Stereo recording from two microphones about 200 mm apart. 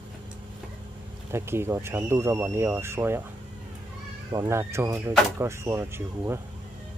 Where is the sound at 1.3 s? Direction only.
10° right (ahead or behind).